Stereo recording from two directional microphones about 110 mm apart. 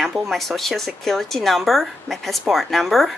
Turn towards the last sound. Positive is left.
turn(degrees=0)  # may be behind; listen again after turning